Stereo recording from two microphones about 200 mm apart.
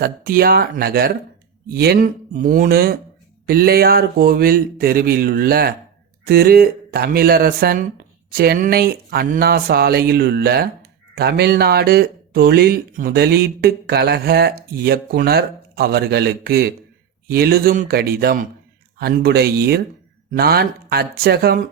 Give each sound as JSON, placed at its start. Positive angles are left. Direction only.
{"t": 0.0, "sound": "speech", "side_deg": -50}